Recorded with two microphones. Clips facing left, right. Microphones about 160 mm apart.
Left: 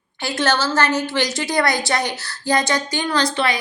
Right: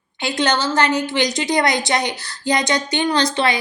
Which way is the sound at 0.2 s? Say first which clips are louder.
Right 1 dB; 15° right (ahead or behind).